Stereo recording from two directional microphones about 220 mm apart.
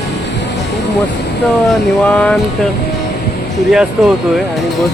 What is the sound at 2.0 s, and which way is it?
Speech, 5° left (ahead or behind).